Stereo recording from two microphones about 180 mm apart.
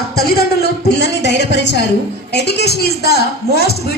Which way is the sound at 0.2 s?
60° left (ahead or behind).